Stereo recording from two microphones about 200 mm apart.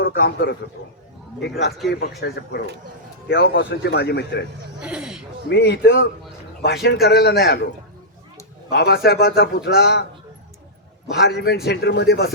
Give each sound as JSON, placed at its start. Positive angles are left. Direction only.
{"t": 0.0, "sound": "a man's voice", "side_deg": 55}
{"t": 4.8, "sound": "speech", "side_deg": -5}
{"t": 5.5, "sound": "a man's voice", "side_deg": 55}
{"t": 8.7, "sound": "speech", "side_deg": 55}
{"t": 11.1, "sound": "a man's voice", "side_deg": 55}